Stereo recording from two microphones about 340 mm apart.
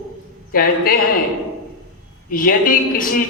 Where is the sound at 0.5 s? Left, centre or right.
Left.